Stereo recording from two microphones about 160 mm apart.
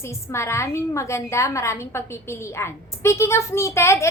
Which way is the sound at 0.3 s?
15° left (ahead or behind).